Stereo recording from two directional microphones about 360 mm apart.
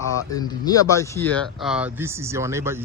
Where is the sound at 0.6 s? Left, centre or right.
Centre.